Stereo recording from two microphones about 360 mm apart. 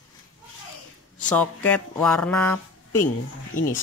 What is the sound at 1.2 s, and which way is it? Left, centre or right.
Speech, centre.